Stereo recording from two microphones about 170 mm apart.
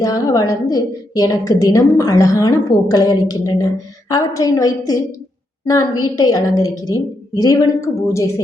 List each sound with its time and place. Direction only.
0.0 s a woman's voice: 20° left (ahead or behind)